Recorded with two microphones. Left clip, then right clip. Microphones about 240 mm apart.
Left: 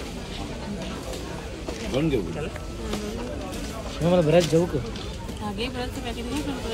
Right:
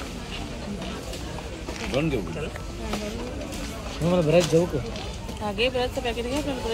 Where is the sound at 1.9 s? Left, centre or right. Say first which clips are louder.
Even; centre.